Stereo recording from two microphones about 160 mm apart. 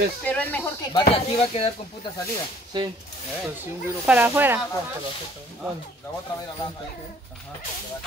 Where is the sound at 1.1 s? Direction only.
40° left (ahead or behind).